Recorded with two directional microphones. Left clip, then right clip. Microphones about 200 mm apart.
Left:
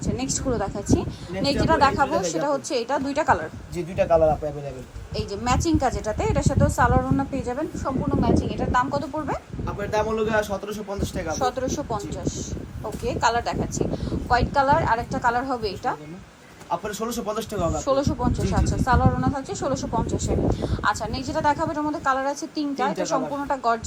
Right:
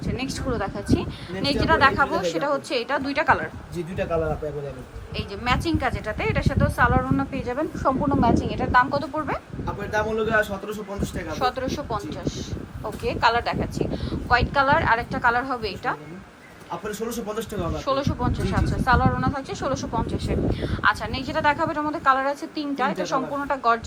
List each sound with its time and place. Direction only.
0.2 s a woman's voice: 15° left (ahead or behind)
5.6 s a woman's voice: 20° left (ahead or behind)
9.6 s a man's voice: 5° left (ahead or behind)
11.3 s a woman's voice: 20° left (ahead or behind)
17.1 s a man's voice: centre (ahead or behind)
17.7 s speech: 20° left (ahead or behind)
18.6 s a man's voice: centre (ahead or behind)
18.9 s a woman's voice: 15° left (ahead or behind)